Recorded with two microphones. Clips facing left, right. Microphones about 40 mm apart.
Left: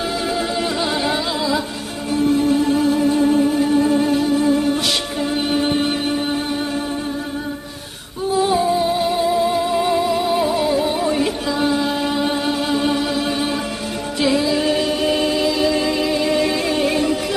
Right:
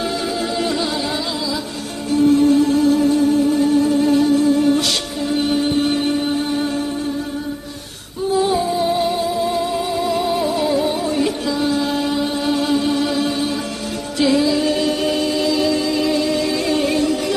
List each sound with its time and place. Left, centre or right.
2.0 s music: centre
4.1 s music: centre
8.3 s music: centre
15.7 s music: left